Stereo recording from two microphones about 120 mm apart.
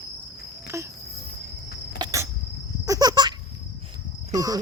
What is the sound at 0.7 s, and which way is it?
Cricket, 25° right (ahead or behind).